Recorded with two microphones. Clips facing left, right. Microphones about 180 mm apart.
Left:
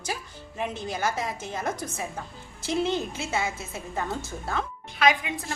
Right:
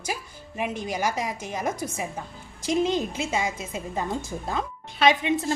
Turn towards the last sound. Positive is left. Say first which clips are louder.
# right 3 dB
turn(degrees=-25)  # may be behind; listen again after turning